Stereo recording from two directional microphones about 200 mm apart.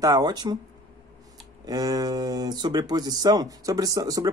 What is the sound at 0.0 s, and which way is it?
Speech, 20° right (ahead or behind).